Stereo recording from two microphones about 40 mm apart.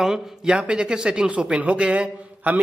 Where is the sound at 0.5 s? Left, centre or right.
Right.